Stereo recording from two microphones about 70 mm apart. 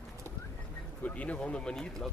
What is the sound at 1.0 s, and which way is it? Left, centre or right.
Speech, left.